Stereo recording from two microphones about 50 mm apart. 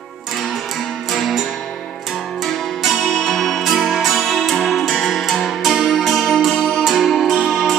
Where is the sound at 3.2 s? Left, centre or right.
Centre.